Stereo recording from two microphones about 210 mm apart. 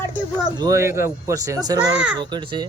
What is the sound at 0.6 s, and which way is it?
Speech, 15° right (ahead or behind).